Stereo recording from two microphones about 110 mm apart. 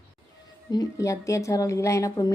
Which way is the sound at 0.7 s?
35° left (ahead or behind).